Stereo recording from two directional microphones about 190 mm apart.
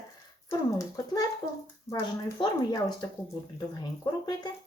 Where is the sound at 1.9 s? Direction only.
15° left (ahead or behind).